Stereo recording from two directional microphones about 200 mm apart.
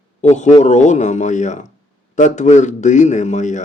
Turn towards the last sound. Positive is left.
turn(degrees=35)  # may be behind; listen again after turning